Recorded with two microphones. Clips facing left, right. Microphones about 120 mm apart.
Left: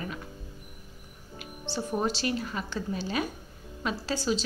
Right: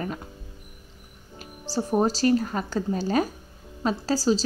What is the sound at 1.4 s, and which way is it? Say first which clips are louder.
A woman's voice: right 5 dB; 40° right (ahead or behind).